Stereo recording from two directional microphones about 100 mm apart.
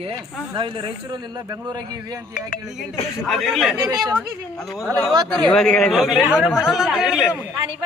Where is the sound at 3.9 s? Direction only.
45° right (ahead or behind).